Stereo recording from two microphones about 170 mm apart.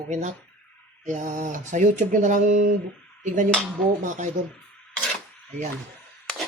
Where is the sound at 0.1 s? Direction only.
45° right (ahead or behind).